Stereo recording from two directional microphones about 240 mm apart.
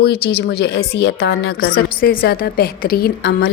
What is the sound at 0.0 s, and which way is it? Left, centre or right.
A woman's voice, left.